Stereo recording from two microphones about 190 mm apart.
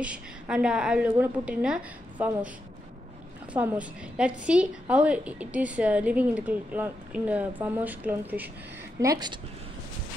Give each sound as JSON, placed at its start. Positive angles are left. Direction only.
{"t": 0.0, "sound": "a woman's voice", "side_deg": -5}
{"t": 3.5, "sound": "a woman's voice", "side_deg": -5}
{"t": 9.0, "sound": "speech", "side_deg": -20}